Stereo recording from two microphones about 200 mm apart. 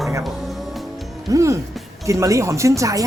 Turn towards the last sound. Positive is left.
turn(degrees=-15)  # may be behind; listen again after turning